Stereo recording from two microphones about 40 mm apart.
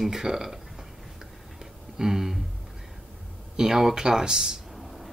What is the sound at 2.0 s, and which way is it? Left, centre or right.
Speech, centre.